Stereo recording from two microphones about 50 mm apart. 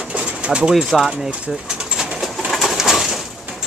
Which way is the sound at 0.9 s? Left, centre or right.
Centre.